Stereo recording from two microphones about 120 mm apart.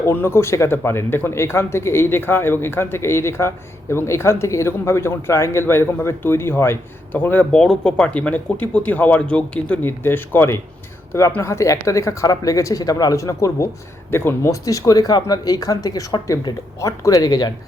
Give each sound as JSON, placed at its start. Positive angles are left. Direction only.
{"t": 0.0, "sound": "speech", "side_deg": 20}